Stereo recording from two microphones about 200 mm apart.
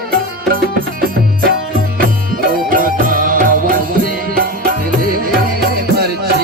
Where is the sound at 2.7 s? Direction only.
45° right (ahead or behind).